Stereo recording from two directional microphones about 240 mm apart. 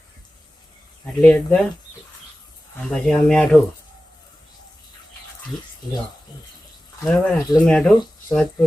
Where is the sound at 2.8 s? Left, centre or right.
Centre.